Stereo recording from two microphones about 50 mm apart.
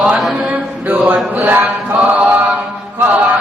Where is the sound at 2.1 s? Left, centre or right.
Right.